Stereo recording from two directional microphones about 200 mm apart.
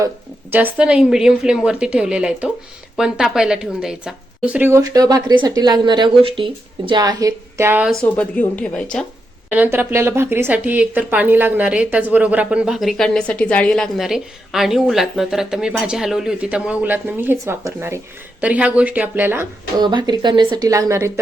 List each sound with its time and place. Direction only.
0.5 s a woman's voice: 5° right (ahead or behind)
8.0 s speech: 10° left (ahead or behind)
9.5 s speech: 10° right (ahead or behind)
19.8 s speech: 20° right (ahead or behind)